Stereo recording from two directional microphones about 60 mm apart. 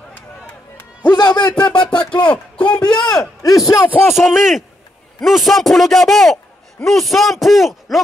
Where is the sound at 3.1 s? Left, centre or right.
Left.